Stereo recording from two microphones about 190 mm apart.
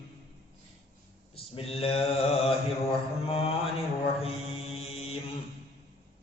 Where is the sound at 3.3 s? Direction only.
30° left (ahead or behind).